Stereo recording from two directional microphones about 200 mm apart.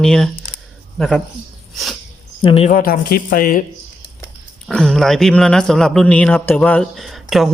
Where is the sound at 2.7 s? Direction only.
40° left (ahead or behind).